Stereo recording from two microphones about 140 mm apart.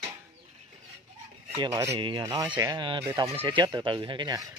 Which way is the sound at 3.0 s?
20° right (ahead or behind).